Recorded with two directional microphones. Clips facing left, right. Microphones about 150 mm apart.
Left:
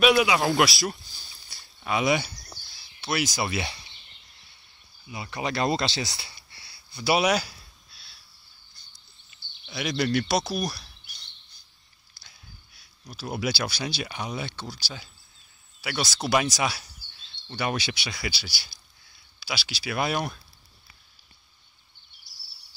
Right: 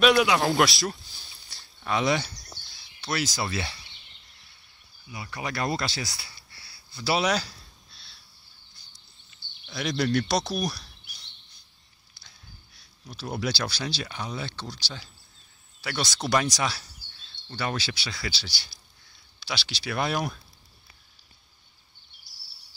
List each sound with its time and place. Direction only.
0.0 s speech: 5° left (ahead or behind)
1.5 s a sound: 10° left (ahead or behind)
5.1 s speech: 25° left (ahead or behind); by 8.2 s 5° left (ahead or behind)
9.7 s speech: 5° left (ahead or behind)
12.2 s a sound: 5° left (ahead or behind)
13.1 s speech: 5° left (ahead or behind)